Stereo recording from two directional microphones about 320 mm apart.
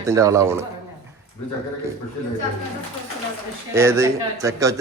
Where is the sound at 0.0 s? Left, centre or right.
Centre.